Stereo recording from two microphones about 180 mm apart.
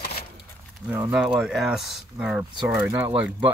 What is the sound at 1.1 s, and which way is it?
Speech, 5° right (ahead or behind).